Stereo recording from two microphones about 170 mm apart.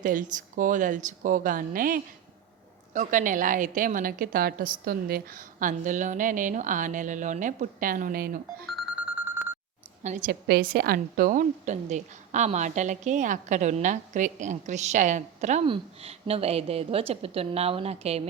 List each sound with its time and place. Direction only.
0.0 s a woman's voice: 50° right (ahead or behind)
8.7 s a sound: 5° right (ahead or behind)
10.2 s a woman's voice: 60° right (ahead or behind); by 15.6 s 45° right (ahead or behind)
15.6 s a woman's voice: 35° right (ahead or behind)